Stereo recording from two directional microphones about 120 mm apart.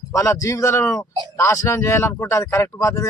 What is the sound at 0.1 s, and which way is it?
A man's voice, 25° left (ahead or behind).